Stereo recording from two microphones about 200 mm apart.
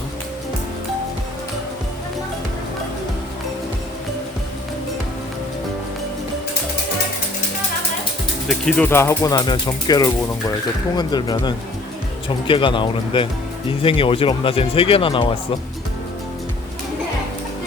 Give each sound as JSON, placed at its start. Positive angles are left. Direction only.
{"t": 8.4, "sound": "speech", "side_deg": 5}